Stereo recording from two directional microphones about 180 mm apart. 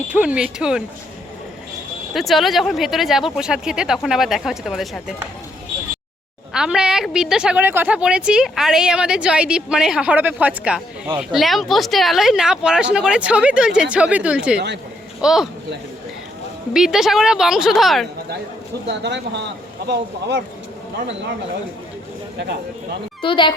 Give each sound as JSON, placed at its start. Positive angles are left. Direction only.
{"t": 0.1, "sound": "a woman's voice", "side_deg": -5}
{"t": 2.1, "sound": "a woman's voice", "side_deg": 0}
{"t": 6.5, "sound": "a woman's voice", "side_deg": -5}
{"t": 16.7, "sound": "a woman's voice", "side_deg": 0}
{"t": 18.9, "sound": "speech", "side_deg": -75}
{"t": 23.2, "sound": "speech", "side_deg": 25}